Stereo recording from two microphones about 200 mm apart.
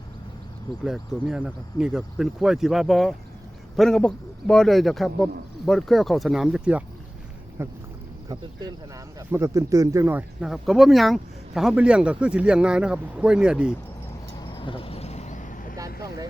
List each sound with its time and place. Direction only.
0.9 s speech: centre (ahead or behind)
9.1 s speech: 15° right (ahead or behind)
14.4 s vehicle: 25° left (ahead or behind); by 15.7 s 40° left (ahead or behind)
16.0 s vehicle: 20° right (ahead or behind)